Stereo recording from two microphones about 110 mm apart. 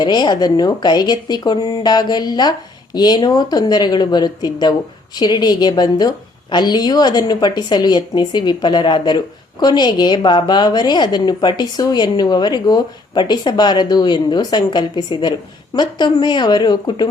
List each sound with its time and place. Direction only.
0.0 s a woman's voice: 40° left (ahead or behind)